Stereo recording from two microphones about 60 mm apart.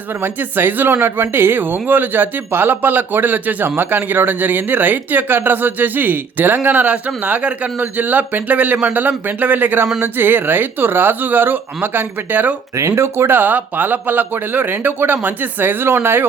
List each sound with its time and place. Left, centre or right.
0.2 s speech: right
13.0 s speech: right